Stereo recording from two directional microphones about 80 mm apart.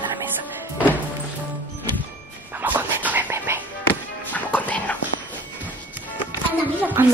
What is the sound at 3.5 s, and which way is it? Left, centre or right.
Music, right.